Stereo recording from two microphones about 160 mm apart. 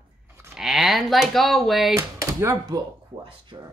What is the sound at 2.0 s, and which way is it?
Speech, 20° right (ahead or behind).